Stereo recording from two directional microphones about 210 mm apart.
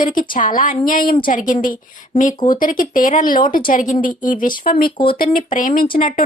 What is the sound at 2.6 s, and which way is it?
A woman's voice, 40° left (ahead or behind).